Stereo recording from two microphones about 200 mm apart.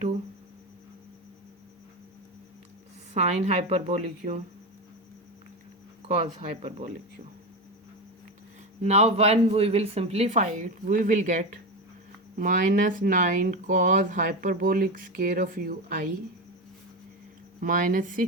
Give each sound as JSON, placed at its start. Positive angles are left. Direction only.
{"t": 3.2, "sound": "speech", "side_deg": -35}
{"t": 6.0, "sound": "speech", "side_deg": -35}
{"t": 8.8, "sound": "speech", "side_deg": -35}
{"t": 17.6, "sound": "speech", "side_deg": -45}